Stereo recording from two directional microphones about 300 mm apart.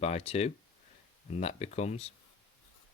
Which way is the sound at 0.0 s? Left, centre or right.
Left.